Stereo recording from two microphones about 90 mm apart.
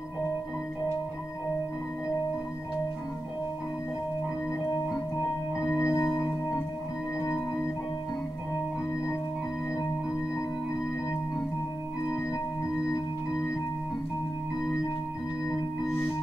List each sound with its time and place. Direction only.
5.7 s organ: 30° left (ahead or behind)